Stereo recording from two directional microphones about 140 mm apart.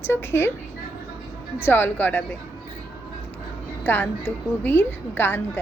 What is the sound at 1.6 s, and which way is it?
Speech, 15° left (ahead or behind).